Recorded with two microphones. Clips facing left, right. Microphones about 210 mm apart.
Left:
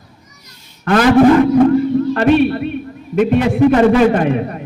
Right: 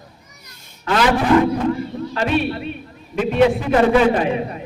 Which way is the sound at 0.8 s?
50° left (ahead or behind).